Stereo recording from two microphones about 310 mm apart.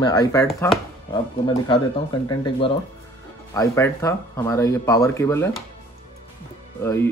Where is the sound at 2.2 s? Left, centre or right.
Centre.